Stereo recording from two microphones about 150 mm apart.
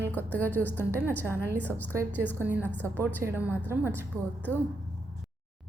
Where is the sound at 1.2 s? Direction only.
15° right (ahead or behind).